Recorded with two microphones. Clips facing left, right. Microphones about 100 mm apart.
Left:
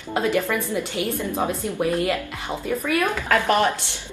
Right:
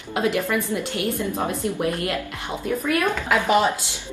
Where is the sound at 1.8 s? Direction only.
Centre (ahead or behind).